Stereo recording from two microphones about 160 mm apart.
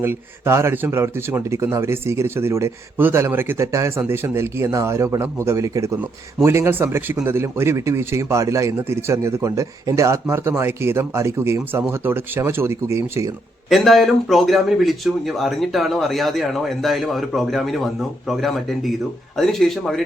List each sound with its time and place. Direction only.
0.0 s speech: 15° right (ahead or behind)
13.7 s speech: centre (ahead or behind)